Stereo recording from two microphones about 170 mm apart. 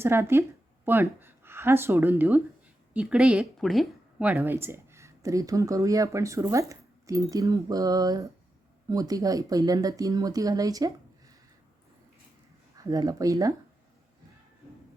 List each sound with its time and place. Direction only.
0.0 s a woman's voice: 15° right (ahead or behind)
4.4 s speech: 15° right (ahead or behind)
12.7 s speech: 20° right (ahead or behind)